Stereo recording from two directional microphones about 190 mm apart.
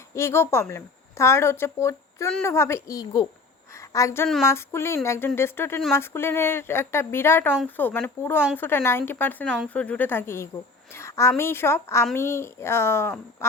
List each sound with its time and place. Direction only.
0.1 s a woman's voice: 15° left (ahead or behind)